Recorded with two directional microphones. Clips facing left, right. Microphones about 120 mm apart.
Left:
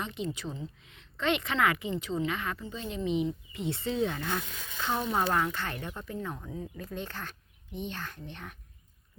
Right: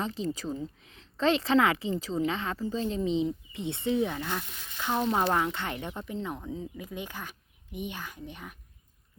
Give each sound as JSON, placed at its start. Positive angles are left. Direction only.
{"t": 0.0, "sound": "speech", "side_deg": -35}